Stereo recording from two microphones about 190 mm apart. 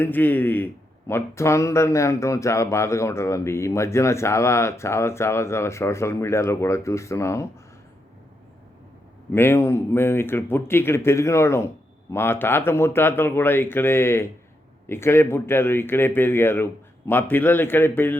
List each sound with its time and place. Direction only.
0.0 s a man's voice: 10° left (ahead or behind)
9.3 s a man's voice: 10° left (ahead or behind)